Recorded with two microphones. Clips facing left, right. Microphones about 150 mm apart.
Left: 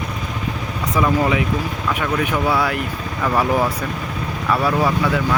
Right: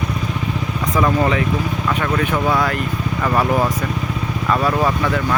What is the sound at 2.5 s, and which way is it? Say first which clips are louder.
Speech: right 1 dB; 10° left (ahead or behind).